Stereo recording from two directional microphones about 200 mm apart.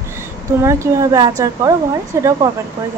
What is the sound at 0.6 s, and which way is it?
A woman's voice, 15° right (ahead or behind).